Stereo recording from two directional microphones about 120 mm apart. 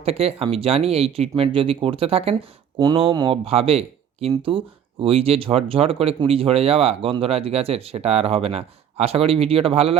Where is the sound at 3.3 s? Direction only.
55° right (ahead or behind).